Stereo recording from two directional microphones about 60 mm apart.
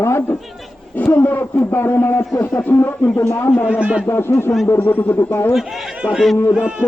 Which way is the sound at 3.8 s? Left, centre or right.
Centre.